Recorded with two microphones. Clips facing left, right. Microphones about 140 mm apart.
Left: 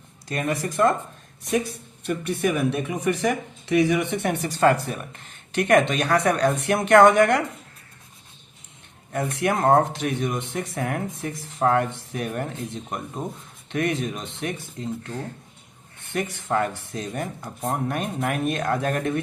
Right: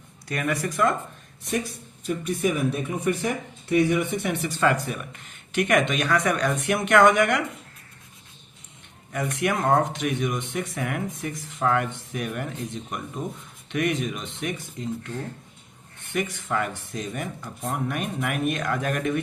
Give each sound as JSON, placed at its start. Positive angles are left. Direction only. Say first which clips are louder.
{"t": 0.3, "sound": "speech", "louder": "left 1 dB", "side_deg": 25}
{"t": 2.0, "sound": "speech", "louder": "left 1 dB", "side_deg": 70}
{"t": 4.3, "sound": "speech", "louder": "left 5 dB", "side_deg": 40}
{"t": 9.1, "sound": "speech", "louder": "left 2 dB", "side_deg": 35}
{"t": 16.1, "sound": "speech", "louder": "left 2 dB", "side_deg": 35}